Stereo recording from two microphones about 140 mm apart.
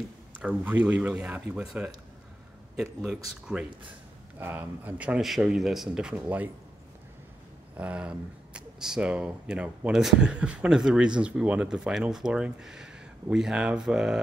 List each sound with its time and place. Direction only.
0.4 s speech: 10° right (ahead or behind)
7.7 s speech: 10° right (ahead or behind)